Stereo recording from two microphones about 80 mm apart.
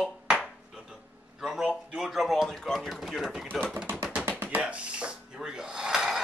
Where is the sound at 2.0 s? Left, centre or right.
Centre.